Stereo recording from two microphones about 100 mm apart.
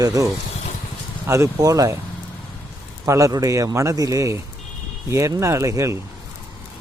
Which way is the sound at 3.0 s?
30° right (ahead or behind).